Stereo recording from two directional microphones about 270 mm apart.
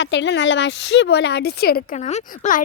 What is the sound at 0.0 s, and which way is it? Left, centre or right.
Speech, left.